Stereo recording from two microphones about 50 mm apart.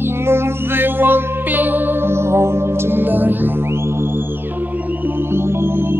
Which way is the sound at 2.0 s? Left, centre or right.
Right.